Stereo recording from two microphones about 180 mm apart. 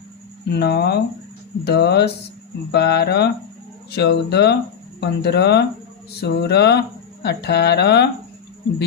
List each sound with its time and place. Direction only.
0.4 s speech: 70° left (ahead or behind)